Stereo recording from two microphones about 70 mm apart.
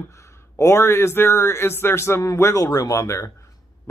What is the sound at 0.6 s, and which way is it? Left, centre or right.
Speech, left.